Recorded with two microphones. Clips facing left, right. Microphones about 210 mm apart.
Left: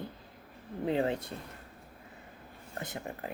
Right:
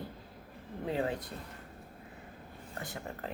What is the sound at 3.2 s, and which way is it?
Speech, 10° left (ahead or behind).